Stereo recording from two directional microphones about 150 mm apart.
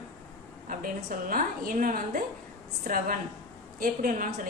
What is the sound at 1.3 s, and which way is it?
A woman's voice, 65° right (ahead or behind).